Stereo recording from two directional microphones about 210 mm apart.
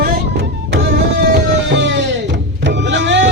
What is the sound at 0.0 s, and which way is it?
Music, 50° right (ahead or behind).